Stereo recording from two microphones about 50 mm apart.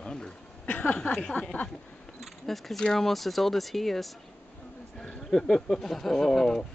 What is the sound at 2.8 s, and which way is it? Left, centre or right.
Speech, centre.